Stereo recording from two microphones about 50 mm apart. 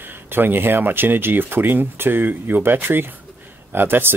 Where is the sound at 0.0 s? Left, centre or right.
Right.